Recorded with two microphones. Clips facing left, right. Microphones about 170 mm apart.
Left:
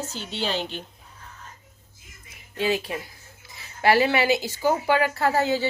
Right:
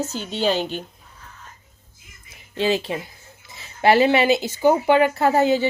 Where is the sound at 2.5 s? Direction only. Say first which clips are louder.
Right 4 dB; 25° right (ahead or behind).